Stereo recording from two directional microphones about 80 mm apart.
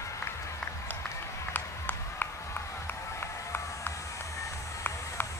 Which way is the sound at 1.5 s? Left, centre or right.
Left.